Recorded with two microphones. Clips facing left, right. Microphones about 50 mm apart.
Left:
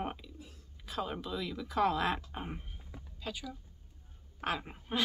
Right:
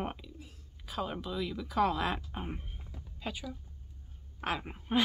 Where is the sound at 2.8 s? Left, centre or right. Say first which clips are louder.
Right 3 dB; centre.